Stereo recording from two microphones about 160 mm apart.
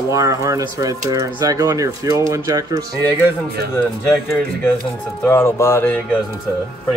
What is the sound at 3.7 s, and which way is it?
Speech, 15° left (ahead or behind).